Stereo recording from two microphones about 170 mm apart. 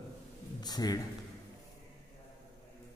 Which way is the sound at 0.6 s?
25° left (ahead or behind).